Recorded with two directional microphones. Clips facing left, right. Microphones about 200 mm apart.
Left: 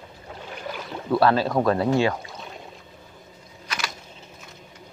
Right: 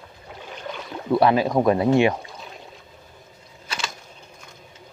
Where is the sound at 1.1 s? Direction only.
15° right (ahead or behind).